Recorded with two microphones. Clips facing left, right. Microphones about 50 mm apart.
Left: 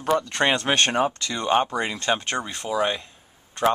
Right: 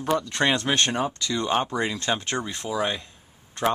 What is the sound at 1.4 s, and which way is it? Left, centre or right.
Speech, centre.